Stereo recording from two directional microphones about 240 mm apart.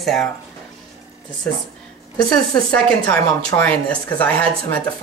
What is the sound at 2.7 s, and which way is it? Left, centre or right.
Speech, centre.